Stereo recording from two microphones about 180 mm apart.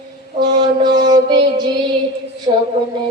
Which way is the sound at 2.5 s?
35° right (ahead or behind).